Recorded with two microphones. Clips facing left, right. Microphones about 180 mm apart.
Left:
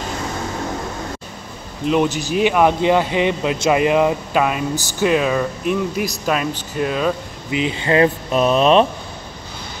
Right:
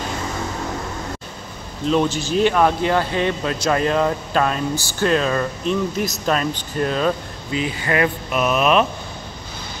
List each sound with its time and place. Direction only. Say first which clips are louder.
1.9 s speech: left 1 dB; 15° left (ahead or behind)
7.5 s speech: left 4 dB; 20° left (ahead or behind)